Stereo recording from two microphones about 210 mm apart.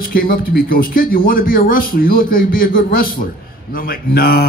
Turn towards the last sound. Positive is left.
turn(degrees=45)  # may be behind; listen again after turning